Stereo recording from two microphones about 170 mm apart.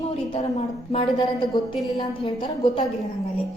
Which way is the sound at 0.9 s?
30° left (ahead or behind).